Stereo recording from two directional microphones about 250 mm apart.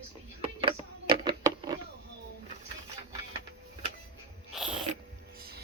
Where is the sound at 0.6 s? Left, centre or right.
Centre.